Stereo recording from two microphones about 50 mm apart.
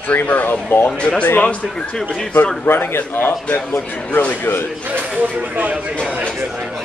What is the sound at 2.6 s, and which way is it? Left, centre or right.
Speech, left.